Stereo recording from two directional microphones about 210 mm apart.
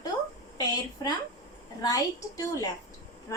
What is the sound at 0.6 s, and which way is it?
A woman's voice, 20° left (ahead or behind).